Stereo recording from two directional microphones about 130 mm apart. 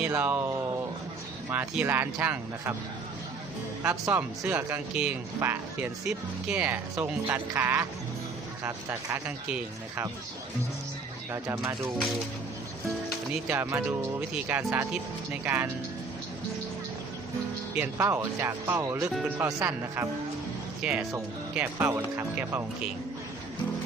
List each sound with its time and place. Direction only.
0.1 s speech: 15° right (ahead or behind)
1.7 s speech: 10° right (ahead or behind)
3.8 s speech: 15° right (ahead or behind)
6.9 s speech: 20° right (ahead or behind)
11.3 s speech: 25° right (ahead or behind)
13.5 s speech: 20° right (ahead or behind)
17.7 s speech: 20° right (ahead or behind)
20.8 s speech: 10° right (ahead or behind)